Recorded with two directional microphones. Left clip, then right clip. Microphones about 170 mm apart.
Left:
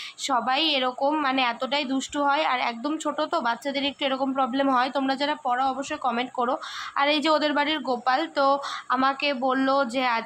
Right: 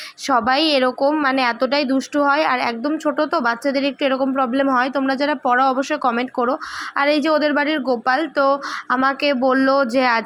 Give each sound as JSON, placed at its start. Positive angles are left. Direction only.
{"t": 0.3, "sound": "speech", "side_deg": -30}